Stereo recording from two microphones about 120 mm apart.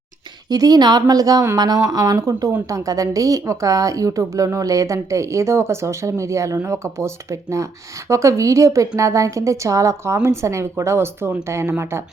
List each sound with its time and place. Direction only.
0.5 s a woman's voice: 35° right (ahead or behind)